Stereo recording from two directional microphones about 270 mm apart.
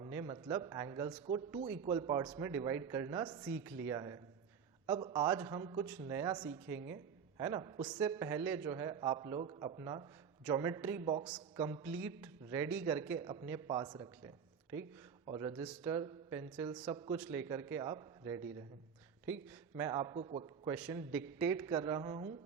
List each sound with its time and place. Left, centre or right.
0.0 s a man's voice: centre
11.5 s a man's voice: centre
15.3 s a man's voice: centre
15.6 s a man's voice: centre
15.9 s a man's voice: centre
20.7 s a man's voice: centre